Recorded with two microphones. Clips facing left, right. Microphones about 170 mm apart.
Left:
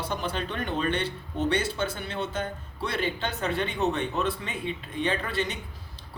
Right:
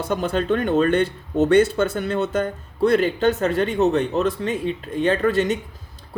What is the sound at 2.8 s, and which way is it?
Speech, 40° right (ahead or behind).